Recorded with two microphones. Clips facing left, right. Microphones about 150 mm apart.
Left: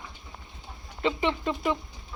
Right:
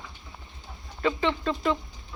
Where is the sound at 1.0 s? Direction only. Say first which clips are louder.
Right 1 dB; 20° left (ahead or behind).